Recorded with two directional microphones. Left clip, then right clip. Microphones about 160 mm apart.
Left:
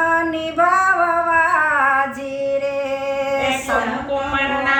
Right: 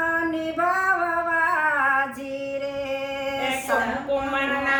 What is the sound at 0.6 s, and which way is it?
Female singing, 20° left (ahead or behind).